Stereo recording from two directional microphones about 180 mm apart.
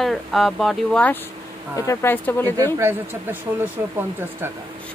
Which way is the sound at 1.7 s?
15° left (ahead or behind).